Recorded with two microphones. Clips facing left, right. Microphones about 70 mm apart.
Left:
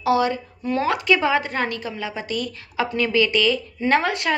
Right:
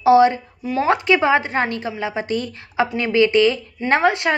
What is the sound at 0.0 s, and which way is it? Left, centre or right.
A woman's voice, right.